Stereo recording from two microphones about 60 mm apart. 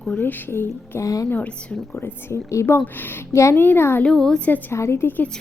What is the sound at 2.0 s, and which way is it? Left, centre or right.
Speech, left.